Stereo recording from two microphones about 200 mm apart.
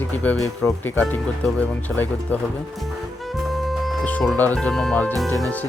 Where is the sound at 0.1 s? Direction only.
5° left (ahead or behind).